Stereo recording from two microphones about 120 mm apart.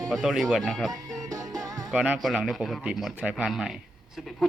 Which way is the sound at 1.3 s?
30° right (ahead or behind).